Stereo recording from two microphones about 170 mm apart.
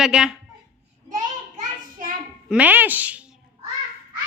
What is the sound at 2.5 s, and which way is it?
Speech, 10° right (ahead or behind).